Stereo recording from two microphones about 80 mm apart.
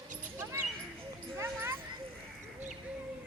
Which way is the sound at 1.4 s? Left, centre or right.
Right.